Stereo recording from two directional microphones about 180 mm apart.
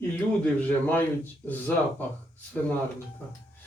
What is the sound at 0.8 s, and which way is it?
Speech, 10° left (ahead or behind).